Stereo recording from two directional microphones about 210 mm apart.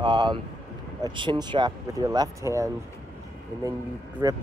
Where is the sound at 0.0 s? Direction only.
20° right (ahead or behind).